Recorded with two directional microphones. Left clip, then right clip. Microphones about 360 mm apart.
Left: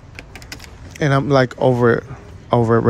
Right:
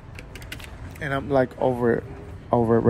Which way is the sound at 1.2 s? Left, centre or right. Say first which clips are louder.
Left 5 dB; right.